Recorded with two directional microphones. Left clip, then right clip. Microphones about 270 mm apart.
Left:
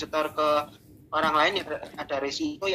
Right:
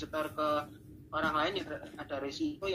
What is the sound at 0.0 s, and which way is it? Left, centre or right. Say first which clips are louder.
Speech: left 8 dB; left.